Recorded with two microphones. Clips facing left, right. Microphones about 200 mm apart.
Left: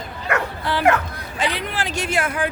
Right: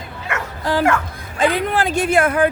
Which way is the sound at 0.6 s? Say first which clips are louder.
Right 3 dB; 40° right (ahead or behind).